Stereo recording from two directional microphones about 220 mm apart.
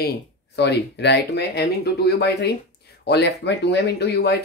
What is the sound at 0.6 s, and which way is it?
Speech, 50° left (ahead or behind).